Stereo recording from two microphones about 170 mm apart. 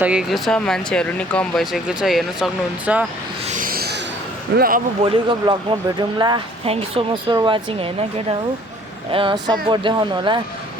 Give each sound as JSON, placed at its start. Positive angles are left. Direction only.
{"t": 0.0, "sound": "speech", "side_deg": -5}
{"t": 3.4, "sound": "a sound", "side_deg": -50}
{"t": 4.5, "sound": "speech", "side_deg": -60}
{"t": 5.0, "sound": "speech", "side_deg": -30}
{"t": 9.1, "sound": "speech", "side_deg": -30}